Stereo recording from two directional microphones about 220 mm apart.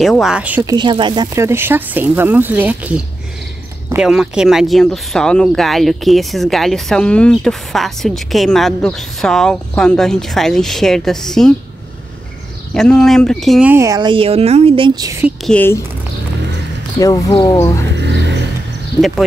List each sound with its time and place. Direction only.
0.0 s speech: centre (ahead or behind)
0.7 s speech: 20° right (ahead or behind); by 11.5 s centre (ahead or behind)
12.7 s speech: 5° left (ahead or behind); by 15.3 s 15° right (ahead or behind)
15.4 s speech: 5° left (ahead or behind)
17.0 s speech: 20° left (ahead or behind)
17.9 s music: 55° right (ahead or behind)
18.9 s speech: centre (ahead or behind)